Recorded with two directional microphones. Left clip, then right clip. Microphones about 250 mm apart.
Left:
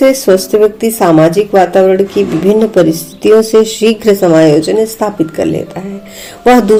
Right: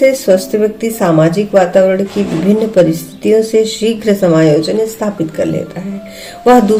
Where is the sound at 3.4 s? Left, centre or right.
Left.